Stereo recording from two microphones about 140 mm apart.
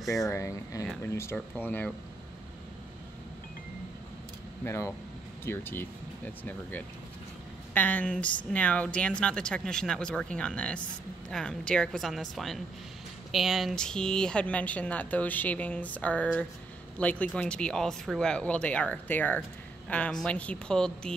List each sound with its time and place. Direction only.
0.3 s speech: 20° left (ahead or behind)
4.6 s speech: 20° left (ahead or behind)
7.7 s a woman's voice: 10° left (ahead or behind)